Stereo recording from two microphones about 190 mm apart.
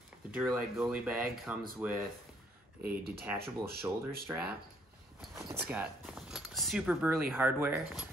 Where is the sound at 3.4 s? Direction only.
55° right (ahead or behind).